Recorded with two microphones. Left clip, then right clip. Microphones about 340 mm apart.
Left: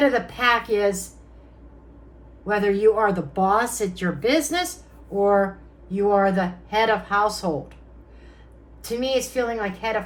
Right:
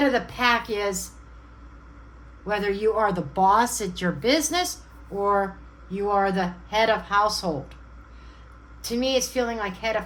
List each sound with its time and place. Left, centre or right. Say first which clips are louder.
0.0 s speech: left 2 dB; right
2.5 s speech: left 5 dB; right
8.8 s speech: left 1 dB; right